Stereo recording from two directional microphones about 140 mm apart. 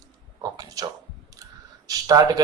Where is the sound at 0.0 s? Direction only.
25° right (ahead or behind).